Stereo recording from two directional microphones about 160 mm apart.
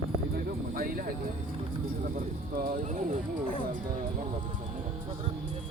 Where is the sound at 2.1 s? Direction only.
65° right (ahead or behind).